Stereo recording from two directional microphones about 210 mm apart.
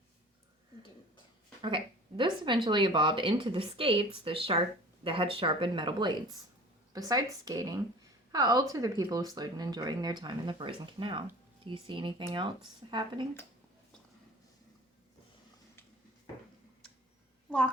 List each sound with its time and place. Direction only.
1.6 s a woman's voice: 25° right (ahead or behind)